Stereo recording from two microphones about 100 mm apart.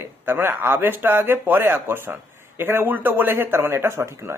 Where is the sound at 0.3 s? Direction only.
20° right (ahead or behind).